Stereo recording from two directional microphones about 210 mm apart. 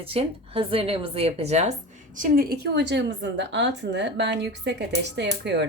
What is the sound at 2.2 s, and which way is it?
A woman's voice, 45° right (ahead or behind).